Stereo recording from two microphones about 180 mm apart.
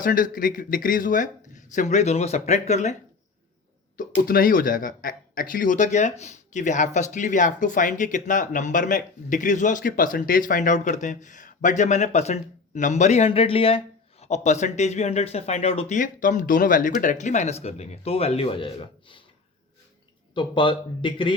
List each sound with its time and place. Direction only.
0.0 s speech: 50° left (ahead or behind)
4.3 s speech: 50° left (ahead or behind); by 16.0 s 35° left (ahead or behind)
16.0 s speech: 45° left (ahead or behind); by 19.2 s 30° left (ahead or behind)
20.3 s speech: 25° left (ahead or behind)